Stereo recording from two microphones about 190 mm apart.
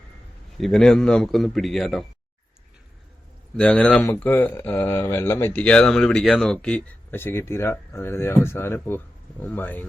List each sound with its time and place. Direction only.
0.6 s a man's voice: centre (ahead or behind)
3.6 s speech: 5° left (ahead or behind)